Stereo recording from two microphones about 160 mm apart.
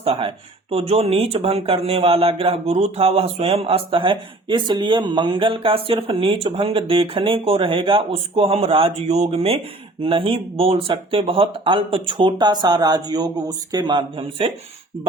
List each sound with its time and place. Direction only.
0.0 s speech: 35° right (ahead or behind)